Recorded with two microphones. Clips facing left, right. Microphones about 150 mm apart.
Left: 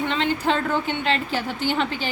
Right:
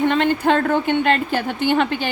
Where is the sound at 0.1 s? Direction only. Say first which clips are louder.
Right 5 dB; 55° right (ahead or behind).